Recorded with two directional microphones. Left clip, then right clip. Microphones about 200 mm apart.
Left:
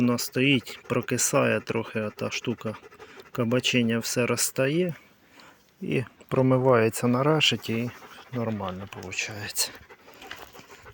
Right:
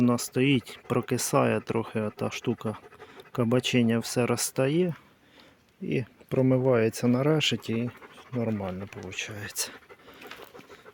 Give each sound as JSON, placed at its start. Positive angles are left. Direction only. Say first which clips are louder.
{"t": 0.0, "sound": "speech", "louder": "left 1 dB", "side_deg": -15}
{"t": 8.4, "sound": "speech", "louder": "even", "side_deg": -20}
{"t": 9.0, "sound": "speech", "louder": "left 5 dB", "side_deg": -10}